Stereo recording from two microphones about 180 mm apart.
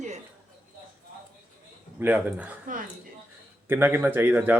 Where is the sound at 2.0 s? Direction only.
10° right (ahead or behind).